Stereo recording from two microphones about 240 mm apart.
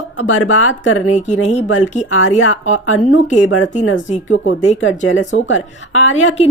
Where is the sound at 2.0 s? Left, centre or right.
Left.